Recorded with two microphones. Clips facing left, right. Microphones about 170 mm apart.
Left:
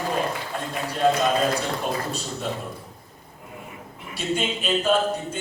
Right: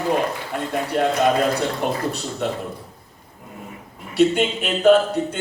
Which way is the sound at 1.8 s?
70° right (ahead or behind).